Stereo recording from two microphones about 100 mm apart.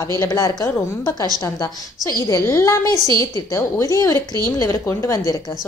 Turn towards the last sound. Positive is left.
turn(degrees=30)  # may be behind; listen again after turning